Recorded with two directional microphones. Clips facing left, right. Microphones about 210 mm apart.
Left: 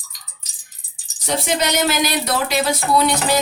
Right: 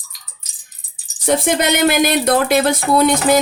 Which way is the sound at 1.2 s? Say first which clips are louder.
Right 5 dB; 55° right (ahead or behind).